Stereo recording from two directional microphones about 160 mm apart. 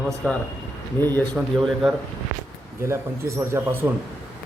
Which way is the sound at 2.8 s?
15° right (ahead or behind).